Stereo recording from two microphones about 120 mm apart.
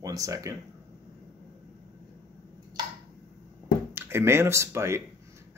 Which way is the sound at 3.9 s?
20° right (ahead or behind).